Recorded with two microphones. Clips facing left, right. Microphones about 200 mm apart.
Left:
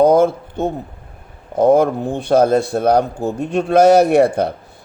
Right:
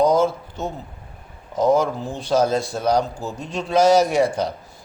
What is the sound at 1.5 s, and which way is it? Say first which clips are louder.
A man's voice: left 6 dB; 55° left (ahead or behind).